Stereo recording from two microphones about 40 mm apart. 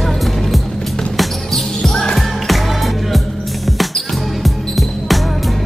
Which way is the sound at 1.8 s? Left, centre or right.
Centre.